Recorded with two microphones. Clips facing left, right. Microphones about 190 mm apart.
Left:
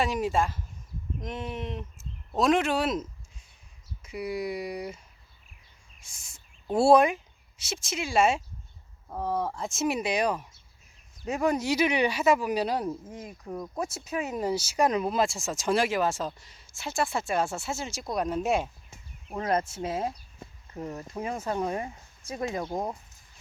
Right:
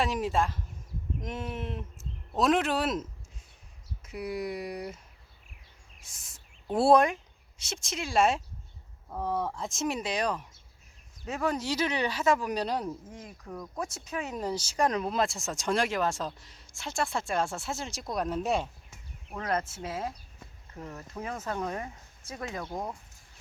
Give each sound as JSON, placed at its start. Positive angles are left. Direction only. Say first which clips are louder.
{"t": 0.0, "sound": "speech", "louder": "left 2 dB", "side_deg": 0}
{"t": 6.0, "sound": "speech", "louder": "left 2 dB", "side_deg": 0}
{"t": 18.9, "sound": "a sound", "louder": "left 3 dB", "side_deg": 25}
{"t": 21.1, "sound": "speech", "louder": "left 3 dB", "side_deg": 15}